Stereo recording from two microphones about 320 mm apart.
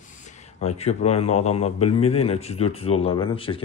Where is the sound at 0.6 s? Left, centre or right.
Centre.